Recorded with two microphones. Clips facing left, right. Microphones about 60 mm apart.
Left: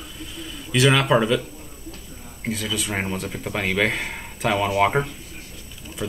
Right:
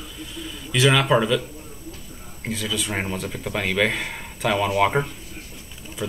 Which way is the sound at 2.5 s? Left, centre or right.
Centre.